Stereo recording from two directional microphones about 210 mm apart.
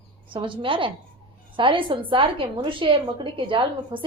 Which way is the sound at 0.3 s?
25° right (ahead or behind).